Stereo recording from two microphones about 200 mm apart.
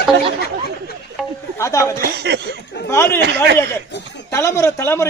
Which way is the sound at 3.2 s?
60° right (ahead or behind).